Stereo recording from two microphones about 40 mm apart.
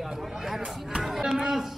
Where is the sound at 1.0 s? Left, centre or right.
Centre.